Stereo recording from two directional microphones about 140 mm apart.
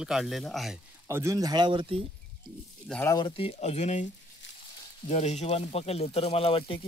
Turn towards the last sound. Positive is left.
turn(degrees=40)  # may be behind; listen again after turning